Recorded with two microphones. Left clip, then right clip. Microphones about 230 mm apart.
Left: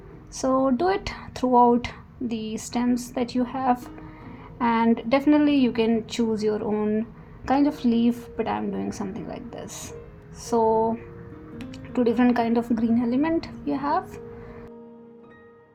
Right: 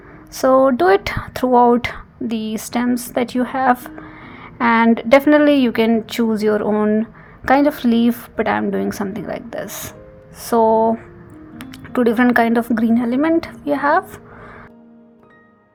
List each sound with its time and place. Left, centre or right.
0.3 s speech: right